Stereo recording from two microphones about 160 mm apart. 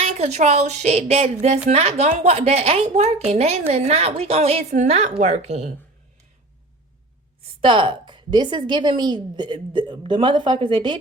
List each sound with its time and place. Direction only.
0.0 s a woman's voice: 40° right (ahead or behind)
7.6 s a woman's voice: 30° right (ahead or behind)